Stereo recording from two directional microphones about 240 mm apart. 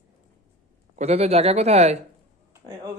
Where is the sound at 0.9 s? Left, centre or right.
Right.